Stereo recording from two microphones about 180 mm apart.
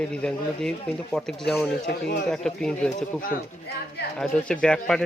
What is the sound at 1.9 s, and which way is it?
Speech, 65° left (ahead or behind).